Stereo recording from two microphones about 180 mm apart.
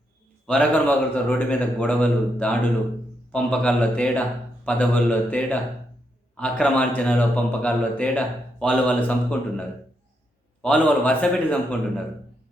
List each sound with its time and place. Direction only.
0.4 s speech: 5° left (ahead or behind)